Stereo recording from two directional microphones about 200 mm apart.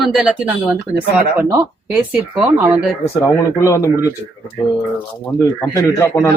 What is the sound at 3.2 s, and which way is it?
Speech, 15° left (ahead or behind).